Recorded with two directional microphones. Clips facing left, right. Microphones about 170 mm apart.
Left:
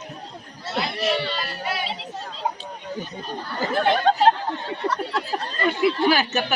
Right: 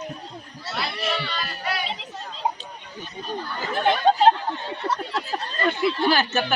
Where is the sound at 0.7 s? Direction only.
25° left (ahead or behind).